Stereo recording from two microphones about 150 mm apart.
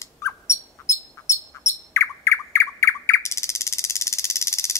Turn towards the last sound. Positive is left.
turn(degrees=20)  # may be behind; listen again after turning